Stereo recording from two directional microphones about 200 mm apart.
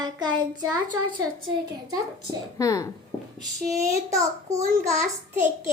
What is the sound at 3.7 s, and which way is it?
A child's voice, 15° right (ahead or behind).